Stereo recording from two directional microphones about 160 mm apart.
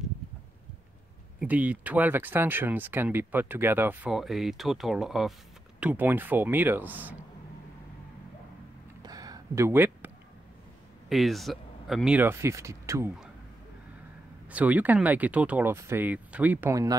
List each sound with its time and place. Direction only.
1.4 s speech: 10° right (ahead or behind)
9.0 s a sound: 25° right (ahead or behind)
11.1 s speech: centre (ahead or behind); by 13.1 s 20° right (ahead or behind)
14.5 s speech: 10° right (ahead or behind)